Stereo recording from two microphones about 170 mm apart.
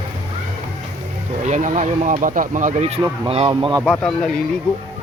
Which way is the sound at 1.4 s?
45° right (ahead or behind).